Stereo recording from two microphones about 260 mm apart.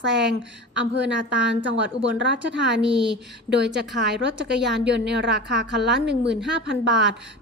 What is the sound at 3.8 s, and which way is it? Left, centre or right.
A woman's voice, right.